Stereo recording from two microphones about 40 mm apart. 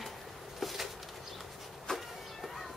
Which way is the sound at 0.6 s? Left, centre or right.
Centre.